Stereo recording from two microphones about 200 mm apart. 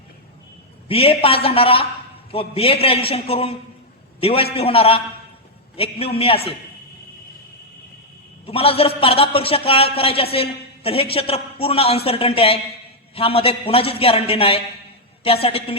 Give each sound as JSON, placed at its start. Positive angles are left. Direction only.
{"t": 0.9, "sound": "a woman's voice", "side_deg": 30}
{"t": 8.4, "sound": "a woman's voice", "side_deg": 30}